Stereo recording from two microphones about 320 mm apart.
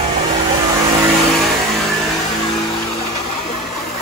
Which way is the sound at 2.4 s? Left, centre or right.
Centre.